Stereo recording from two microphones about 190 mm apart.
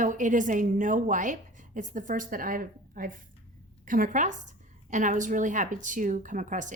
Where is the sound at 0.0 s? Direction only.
40° right (ahead or behind).